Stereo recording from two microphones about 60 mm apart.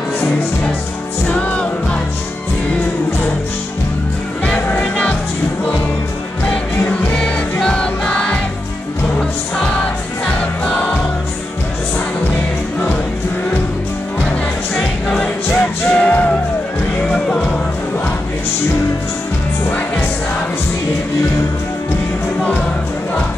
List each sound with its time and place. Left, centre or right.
1.3 s music: left
4.6 s music: left
6.9 s music: left
15.1 s music: centre